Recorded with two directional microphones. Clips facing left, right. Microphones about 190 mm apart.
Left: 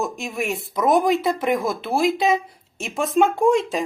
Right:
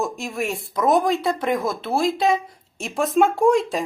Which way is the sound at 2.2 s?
Centre (ahead or behind).